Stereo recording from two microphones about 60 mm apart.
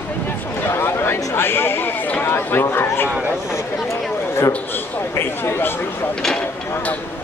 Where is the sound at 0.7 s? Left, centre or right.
Left.